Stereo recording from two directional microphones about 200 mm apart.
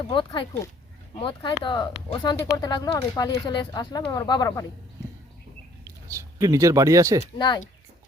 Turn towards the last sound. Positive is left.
turn(degrees=20)  # may be behind; listen again after turning